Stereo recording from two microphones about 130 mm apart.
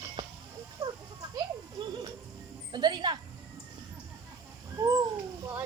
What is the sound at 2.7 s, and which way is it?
Speech, 35° right (ahead or behind).